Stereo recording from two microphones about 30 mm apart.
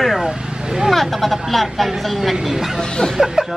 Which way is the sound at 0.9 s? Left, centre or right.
Centre.